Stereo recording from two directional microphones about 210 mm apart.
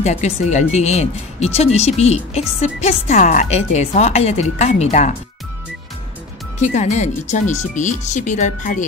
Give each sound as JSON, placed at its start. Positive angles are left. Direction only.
{"t": 0.0, "sound": "a woman's voice", "side_deg": 35}
{"t": 6.6, "sound": "a woman's voice", "side_deg": 35}